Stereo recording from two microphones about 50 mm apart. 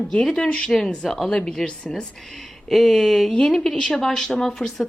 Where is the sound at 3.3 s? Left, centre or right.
Centre.